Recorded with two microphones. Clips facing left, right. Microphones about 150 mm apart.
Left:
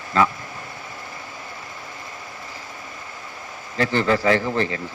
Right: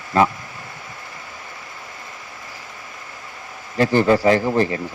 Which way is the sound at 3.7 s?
20° right (ahead or behind).